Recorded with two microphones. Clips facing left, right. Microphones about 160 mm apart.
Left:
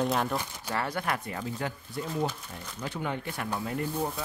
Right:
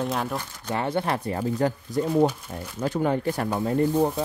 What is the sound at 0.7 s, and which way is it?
Speech, 25° right (ahead or behind).